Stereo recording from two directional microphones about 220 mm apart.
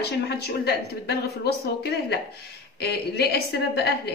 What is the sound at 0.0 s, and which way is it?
A woman's voice, 50° left (ahead or behind).